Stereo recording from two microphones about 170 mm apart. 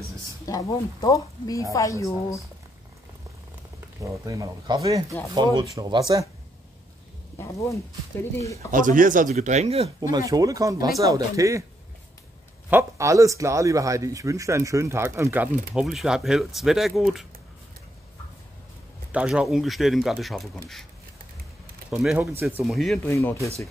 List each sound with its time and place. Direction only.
0.5 s speech: 20° left (ahead or behind)
4.0 s speech: 20° right (ahead or behind)
7.3 s speech: 15° left (ahead or behind)
8.7 s speech: 50° right (ahead or behind)
10.1 s speech: 20° right (ahead or behind)
12.6 s a man's voice: 15° right (ahead or behind)
15.7 s speech: centre (ahead or behind)
19.1 s speech: 5° right (ahead or behind)
21.9 s speech: 5° right (ahead or behind)
23.0 s speech: 15° left (ahead or behind)